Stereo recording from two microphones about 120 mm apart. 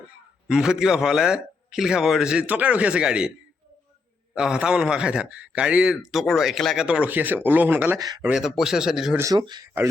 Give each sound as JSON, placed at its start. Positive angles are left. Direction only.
{"t": 0.4, "sound": "a man's voice", "side_deg": -5}
{"t": 4.4, "sound": "a man's voice", "side_deg": -5}
{"t": 7.9, "sound": "speech", "side_deg": -35}
{"t": 8.3, "sound": "a man's voice", "side_deg": 0}
{"t": 9.3, "sound": "speech", "side_deg": -35}